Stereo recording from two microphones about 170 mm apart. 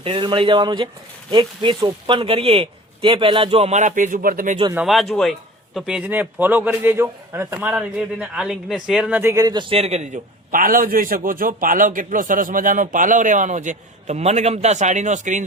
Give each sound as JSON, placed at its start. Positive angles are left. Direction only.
{"t": 0.0, "sound": "a man's voice", "side_deg": -30}
{"t": 4.7, "sound": "a man's voice", "side_deg": -5}